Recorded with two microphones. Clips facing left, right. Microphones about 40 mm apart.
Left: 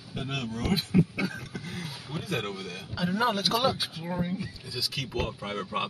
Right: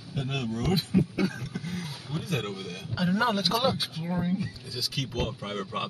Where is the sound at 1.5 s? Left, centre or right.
Centre.